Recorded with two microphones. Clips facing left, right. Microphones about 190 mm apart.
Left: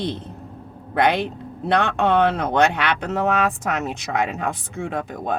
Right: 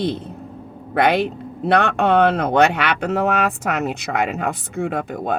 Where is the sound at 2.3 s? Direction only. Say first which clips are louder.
Right 3 dB; 60° right (ahead or behind).